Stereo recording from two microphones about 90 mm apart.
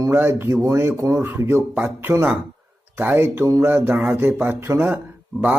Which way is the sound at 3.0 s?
20° right (ahead or behind).